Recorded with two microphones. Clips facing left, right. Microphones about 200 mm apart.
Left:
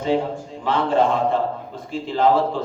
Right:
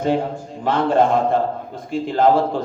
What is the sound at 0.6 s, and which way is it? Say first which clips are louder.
A man's voice: right 2 dB; 45° right (ahead or behind).